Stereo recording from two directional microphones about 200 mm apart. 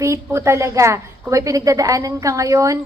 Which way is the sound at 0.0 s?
15° right (ahead or behind).